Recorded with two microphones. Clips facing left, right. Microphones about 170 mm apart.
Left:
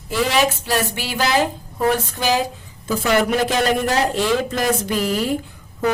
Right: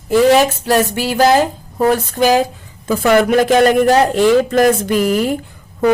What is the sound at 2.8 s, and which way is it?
Speech, 60° right (ahead or behind).